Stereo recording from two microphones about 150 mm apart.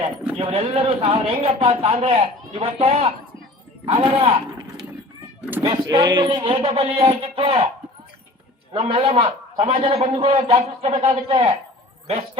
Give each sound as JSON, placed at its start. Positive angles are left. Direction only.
{"t": 0.3, "sound": "a man's voice", "side_deg": -40}
{"t": 5.6, "sound": "a man's voice", "side_deg": -25}
{"t": 8.7, "sound": "a man's voice", "side_deg": -40}